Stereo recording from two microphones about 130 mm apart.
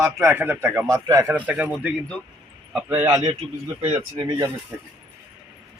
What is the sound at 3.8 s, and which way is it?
Speech, 55° right (ahead or behind).